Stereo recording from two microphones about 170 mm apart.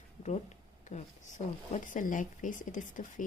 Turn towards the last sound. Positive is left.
turn(degrees=50)  # may be behind; listen again after turning